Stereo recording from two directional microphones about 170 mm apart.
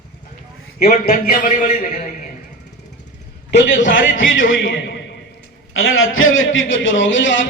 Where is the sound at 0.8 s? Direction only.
60° left (ahead or behind).